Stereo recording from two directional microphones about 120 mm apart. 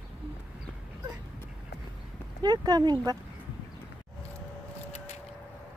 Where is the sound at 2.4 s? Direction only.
35° right (ahead or behind).